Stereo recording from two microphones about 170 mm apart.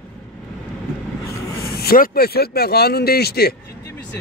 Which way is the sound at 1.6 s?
65° left (ahead or behind).